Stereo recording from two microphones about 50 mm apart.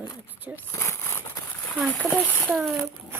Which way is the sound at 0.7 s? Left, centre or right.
Left.